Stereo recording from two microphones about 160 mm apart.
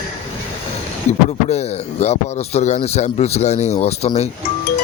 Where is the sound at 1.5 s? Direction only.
45° left (ahead or behind).